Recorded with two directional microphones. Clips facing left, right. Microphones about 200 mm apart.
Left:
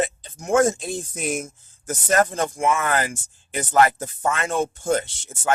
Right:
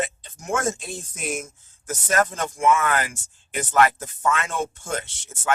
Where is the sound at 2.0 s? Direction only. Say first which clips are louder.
Left 3 dB; 35° left (ahead or behind).